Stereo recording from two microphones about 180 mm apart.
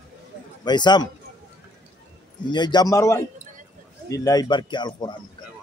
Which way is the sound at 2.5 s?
25° left (ahead or behind).